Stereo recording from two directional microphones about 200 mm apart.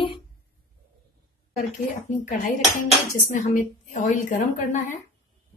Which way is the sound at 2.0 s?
40° left (ahead or behind).